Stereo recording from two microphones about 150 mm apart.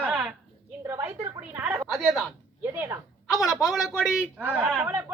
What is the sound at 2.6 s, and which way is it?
Speech, 15° right (ahead or behind).